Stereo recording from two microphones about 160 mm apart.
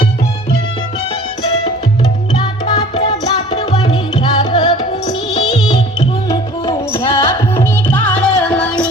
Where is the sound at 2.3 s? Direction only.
35° left (ahead or behind).